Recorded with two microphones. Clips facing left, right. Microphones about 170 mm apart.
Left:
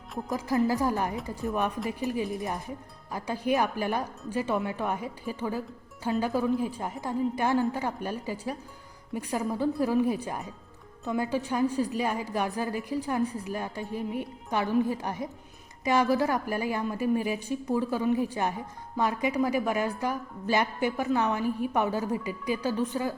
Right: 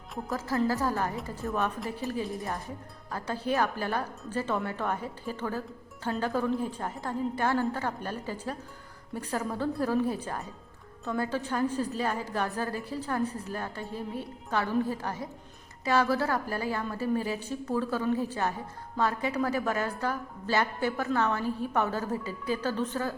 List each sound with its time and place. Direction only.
0.3 s a woman's voice: 15° left (ahead or behind)